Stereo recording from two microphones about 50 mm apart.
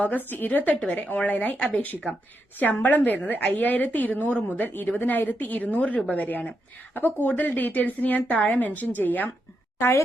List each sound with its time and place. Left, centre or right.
0.0 s a woman's voice: left
9.7 s a woman's voice: left